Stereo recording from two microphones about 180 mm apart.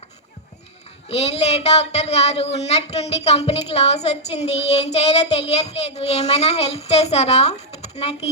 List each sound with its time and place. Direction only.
1.0 s speech: 35° left (ahead or behind)